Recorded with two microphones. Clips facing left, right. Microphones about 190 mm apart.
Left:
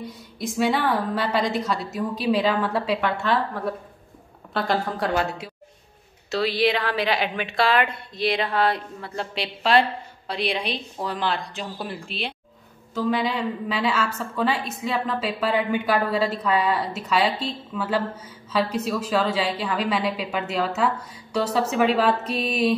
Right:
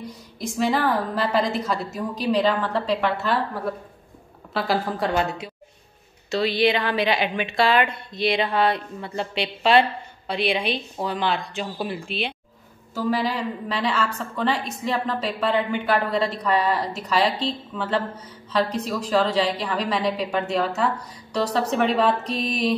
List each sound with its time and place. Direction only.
0.0 s a woman's voice: centre (ahead or behind)